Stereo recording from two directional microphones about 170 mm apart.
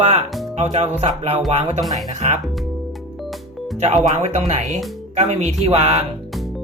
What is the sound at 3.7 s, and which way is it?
Speech, 40° right (ahead or behind).